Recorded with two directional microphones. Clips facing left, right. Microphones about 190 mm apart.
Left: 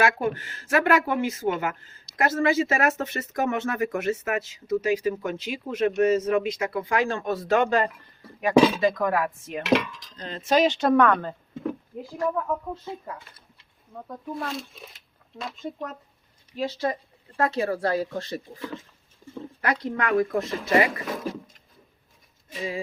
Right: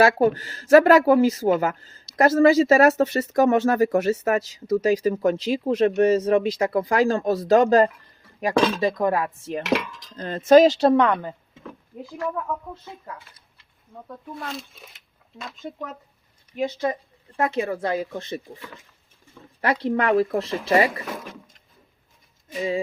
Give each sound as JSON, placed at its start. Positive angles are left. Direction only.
{"t": 0.0, "sound": "speech", "side_deg": -35}
{"t": 8.5, "sound": "speech", "side_deg": 10}
{"t": 8.8, "sound": "speech", "side_deg": -30}
{"t": 10.2, "sound": "speech", "side_deg": -50}
{"t": 10.9, "sound": "speech", "side_deg": -20}
{"t": 14.3, "sound": "speech", "side_deg": 0}
{"t": 16.6, "sound": "speech", "side_deg": -20}
{"t": 19.6, "sound": "speech", "side_deg": -30}